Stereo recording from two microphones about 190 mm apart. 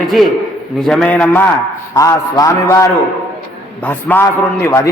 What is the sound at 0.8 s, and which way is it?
Mantra, centre (ahead or behind).